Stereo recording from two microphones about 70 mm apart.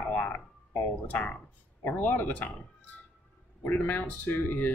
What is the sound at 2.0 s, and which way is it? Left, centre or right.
Speech, left.